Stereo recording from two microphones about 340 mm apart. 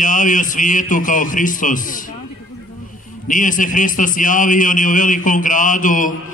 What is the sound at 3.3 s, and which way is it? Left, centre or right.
A man's voice, left.